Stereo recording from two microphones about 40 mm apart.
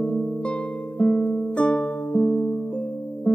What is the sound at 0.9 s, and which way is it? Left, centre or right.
Music, centre.